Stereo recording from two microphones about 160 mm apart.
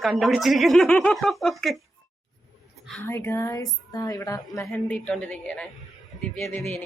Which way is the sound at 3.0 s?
15° left (ahead or behind).